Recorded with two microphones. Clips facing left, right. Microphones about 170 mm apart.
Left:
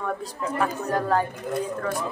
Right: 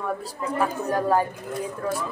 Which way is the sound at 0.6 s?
10° right (ahead or behind).